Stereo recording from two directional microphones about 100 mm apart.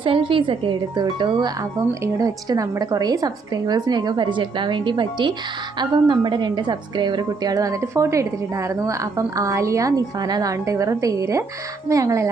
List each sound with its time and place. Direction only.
0.0 s speech: 60° right (ahead or behind)
2.1 s a woman's voice: 35° right (ahead or behind)